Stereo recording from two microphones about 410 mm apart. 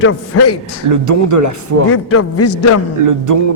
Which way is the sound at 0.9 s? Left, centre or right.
Right.